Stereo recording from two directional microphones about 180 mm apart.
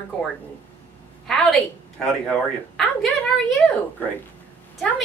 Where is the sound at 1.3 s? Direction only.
Centre (ahead or behind).